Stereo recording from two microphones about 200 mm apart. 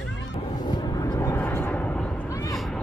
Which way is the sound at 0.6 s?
20° left (ahead or behind).